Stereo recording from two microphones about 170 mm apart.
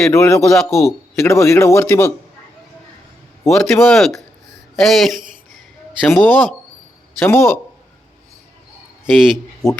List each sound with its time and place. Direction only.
0.1 s speech: 15° left (ahead or behind)
0.4 s speech: centre (ahead or behind)
1.2 s speech: 15° left (ahead or behind)
3.5 s speech: 5° left (ahead or behind)
9.3 s speech: centre (ahead or behind)